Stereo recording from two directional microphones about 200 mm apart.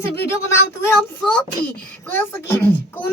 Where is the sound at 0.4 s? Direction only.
10° left (ahead or behind).